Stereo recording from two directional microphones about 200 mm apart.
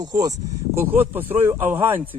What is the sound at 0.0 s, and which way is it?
A man's voice, 20° right (ahead or behind).